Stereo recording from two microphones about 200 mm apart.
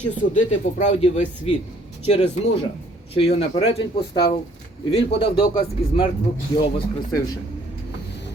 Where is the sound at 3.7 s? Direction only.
25° left (ahead or behind).